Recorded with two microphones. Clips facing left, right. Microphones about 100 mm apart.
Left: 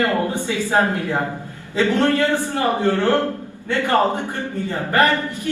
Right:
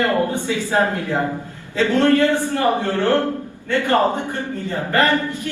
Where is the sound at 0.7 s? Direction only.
20° left (ahead or behind).